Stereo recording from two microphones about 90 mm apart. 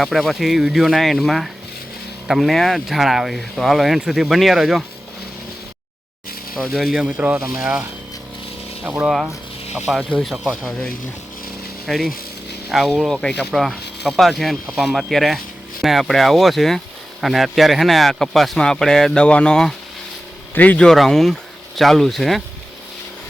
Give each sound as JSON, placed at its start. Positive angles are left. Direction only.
{"t": 0.0, "sound": "speech", "side_deg": 0}
{"t": 6.7, "sound": "speech", "side_deg": -5}
{"t": 8.8, "sound": "speech", "side_deg": -20}
{"t": 9.0, "sound": "speech", "side_deg": -5}
{"t": 10.6, "sound": "a man's voice", "side_deg": 0}
{"t": 20.8, "sound": "speech", "side_deg": 0}